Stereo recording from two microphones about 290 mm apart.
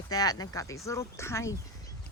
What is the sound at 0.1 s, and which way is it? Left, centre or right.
Speech, centre.